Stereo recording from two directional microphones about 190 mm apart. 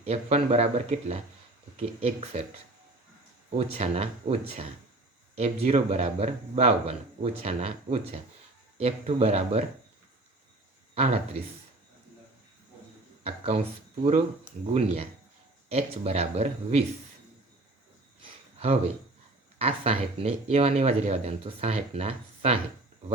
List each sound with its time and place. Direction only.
0.0 s speech: 35° right (ahead or behind)
3.8 s speech: 35° right (ahead or behind)
10.9 s speech: 35° right (ahead or behind)
13.2 s a sound: 30° right (ahead or behind)
14.0 s speech: 35° right (ahead or behind)
18.2 s a sound: 35° right (ahead or behind)
19.5 s speech: 30° right (ahead or behind)